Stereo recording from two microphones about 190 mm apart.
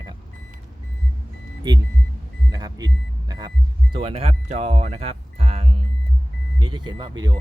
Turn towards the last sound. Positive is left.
turn(degrees=-25)  # may be behind; listen again after turning